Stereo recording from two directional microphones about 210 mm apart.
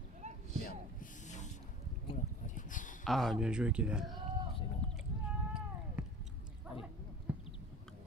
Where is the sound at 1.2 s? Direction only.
35° left (ahead or behind).